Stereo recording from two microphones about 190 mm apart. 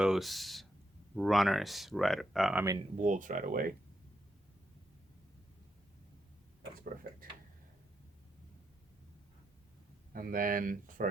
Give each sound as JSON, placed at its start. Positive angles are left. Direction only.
{"t": 0.0, "sound": "a sound", "side_deg": 0}
{"t": 1.1, "sound": "speech", "side_deg": 0}
{"t": 3.0, "sound": "speech", "side_deg": -40}
{"t": 10.1, "sound": "speech", "side_deg": -50}